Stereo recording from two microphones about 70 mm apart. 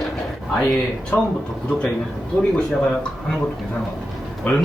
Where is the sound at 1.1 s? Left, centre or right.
Left.